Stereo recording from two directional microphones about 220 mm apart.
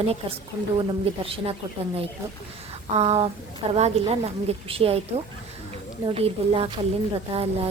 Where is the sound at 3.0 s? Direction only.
30° right (ahead or behind).